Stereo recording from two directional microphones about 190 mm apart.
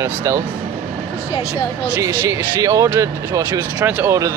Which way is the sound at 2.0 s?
15° right (ahead or behind).